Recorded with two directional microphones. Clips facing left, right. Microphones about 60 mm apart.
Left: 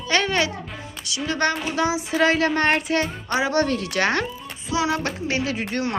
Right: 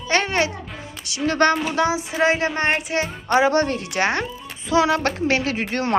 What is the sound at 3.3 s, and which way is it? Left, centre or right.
Speech, right.